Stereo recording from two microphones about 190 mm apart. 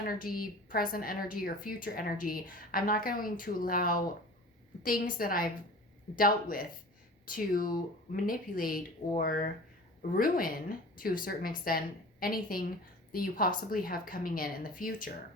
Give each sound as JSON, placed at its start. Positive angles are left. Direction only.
{"t": 0.1, "sound": "a woman's voice", "side_deg": 50}